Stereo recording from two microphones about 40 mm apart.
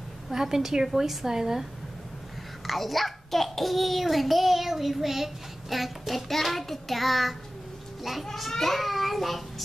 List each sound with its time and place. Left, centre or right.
0.3 s a woman's voice: centre
2.6 s a child's voice: centre